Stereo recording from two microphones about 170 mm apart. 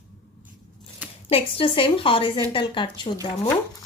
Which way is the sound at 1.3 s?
35° left (ahead or behind).